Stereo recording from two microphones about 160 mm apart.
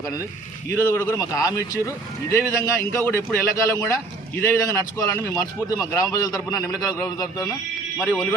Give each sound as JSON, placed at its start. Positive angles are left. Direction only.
{"t": 0.7, "sound": "a man's voice", "side_deg": 15}
{"t": 8.1, "sound": "speech", "side_deg": 10}